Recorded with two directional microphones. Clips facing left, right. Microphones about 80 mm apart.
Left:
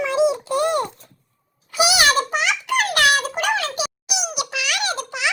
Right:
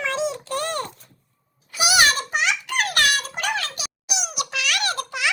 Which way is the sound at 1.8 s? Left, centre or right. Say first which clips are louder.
Left 3 dB; left.